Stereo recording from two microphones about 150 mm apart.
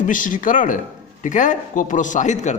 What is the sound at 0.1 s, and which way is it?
A man's voice, 65° left (ahead or behind).